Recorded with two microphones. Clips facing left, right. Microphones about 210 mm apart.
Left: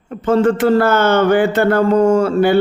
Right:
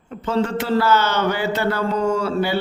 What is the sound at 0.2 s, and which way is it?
A man's voice, 50° left (ahead or behind).